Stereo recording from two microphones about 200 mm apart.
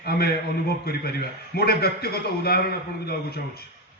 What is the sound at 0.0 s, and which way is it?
A man's voice, 50° left (ahead or behind).